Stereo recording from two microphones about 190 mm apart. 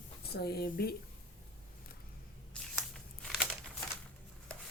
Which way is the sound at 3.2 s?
Centre (ahead or behind).